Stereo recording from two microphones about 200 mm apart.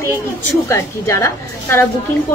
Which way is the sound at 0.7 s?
15° left (ahead or behind).